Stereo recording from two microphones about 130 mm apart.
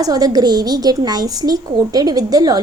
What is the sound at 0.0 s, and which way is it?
Speech, 30° right (ahead or behind).